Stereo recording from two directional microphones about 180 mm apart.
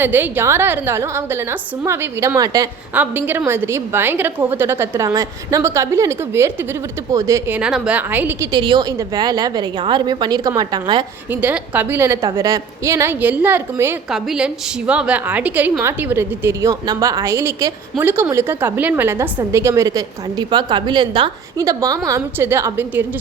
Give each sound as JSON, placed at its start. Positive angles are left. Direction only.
{"t": 0.0, "sound": "a woman's voice", "side_deg": -10}
{"t": 2.9, "sound": "a woman's voice", "side_deg": -10}
{"t": 8.5, "sound": "a woman's voice", "side_deg": -25}
{"t": 11.3, "sound": "a woman's voice", "side_deg": -10}